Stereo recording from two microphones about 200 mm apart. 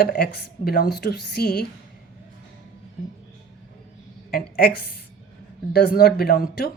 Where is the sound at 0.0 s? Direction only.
50° left (ahead or behind).